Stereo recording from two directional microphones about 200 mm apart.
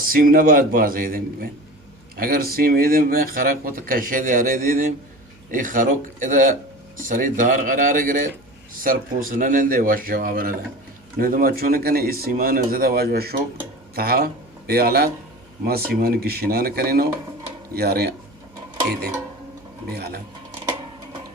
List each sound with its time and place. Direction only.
0.0 s speech: 45° right (ahead or behind)
19.9 s speech: 50° right (ahead or behind)